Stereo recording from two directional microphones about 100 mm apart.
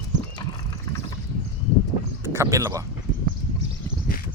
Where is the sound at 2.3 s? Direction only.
30° right (ahead or behind).